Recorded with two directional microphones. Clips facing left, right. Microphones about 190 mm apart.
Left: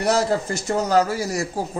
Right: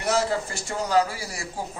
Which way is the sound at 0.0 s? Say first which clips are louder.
Left 4 dB; 40° left (ahead or behind).